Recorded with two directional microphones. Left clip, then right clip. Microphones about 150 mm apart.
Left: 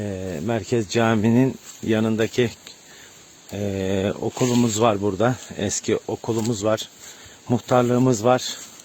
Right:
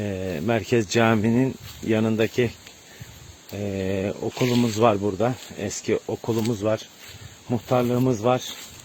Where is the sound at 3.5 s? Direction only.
30° left (ahead or behind).